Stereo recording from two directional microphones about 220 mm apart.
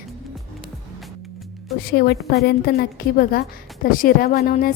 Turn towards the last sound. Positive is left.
turn(degrees=45)  # may be behind; listen again after turning